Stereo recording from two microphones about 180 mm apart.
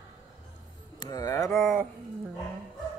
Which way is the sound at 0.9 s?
20° left (ahead or behind).